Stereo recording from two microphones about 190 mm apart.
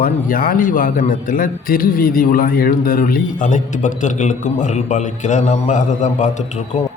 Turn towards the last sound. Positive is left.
turn(degrees=40)  # may be behind; listen again after turning